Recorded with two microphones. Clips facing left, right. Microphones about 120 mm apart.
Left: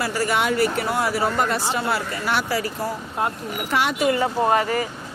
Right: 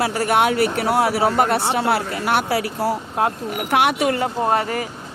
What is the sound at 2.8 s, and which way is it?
Speech, 75° right (ahead or behind).